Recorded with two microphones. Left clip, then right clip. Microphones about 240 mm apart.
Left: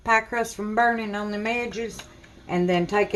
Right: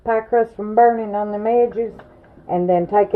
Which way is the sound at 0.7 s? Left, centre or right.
Left.